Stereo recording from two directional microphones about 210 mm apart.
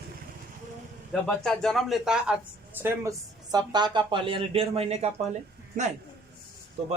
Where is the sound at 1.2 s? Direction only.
Centre (ahead or behind); by 5.1 s 30° right (ahead or behind).